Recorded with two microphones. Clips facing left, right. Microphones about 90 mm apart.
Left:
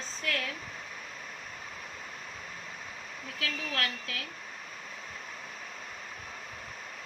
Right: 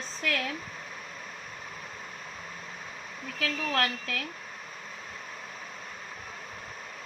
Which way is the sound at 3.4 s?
60° right (ahead or behind).